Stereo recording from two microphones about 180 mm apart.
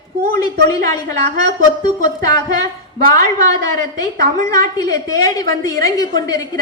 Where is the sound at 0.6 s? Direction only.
20° left (ahead or behind).